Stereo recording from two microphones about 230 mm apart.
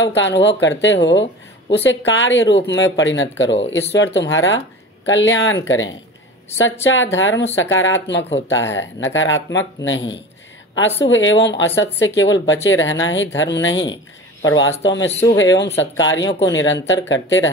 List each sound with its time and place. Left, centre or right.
0.0 s speech: left
15.0 s speech: centre
15.3 s speech: left